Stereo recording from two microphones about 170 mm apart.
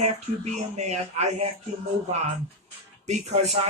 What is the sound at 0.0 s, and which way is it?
Speech, 40° right (ahead or behind).